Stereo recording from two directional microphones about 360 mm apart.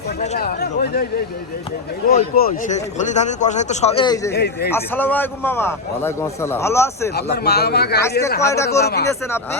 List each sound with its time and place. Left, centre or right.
0.2 s speech: left
2.0 s speech: left
4.4 s speech: left
4.7 s a man's voice: centre
7.2 s speech: left
8.4 s a man's voice: centre
8.8 s speech: left
9.0 s a man's voice: centre